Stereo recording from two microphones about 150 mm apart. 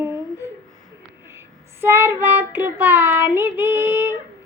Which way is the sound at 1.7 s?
15° right (ahead or behind).